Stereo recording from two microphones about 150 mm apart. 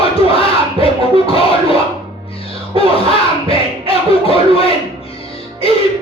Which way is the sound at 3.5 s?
40° left (ahead or behind).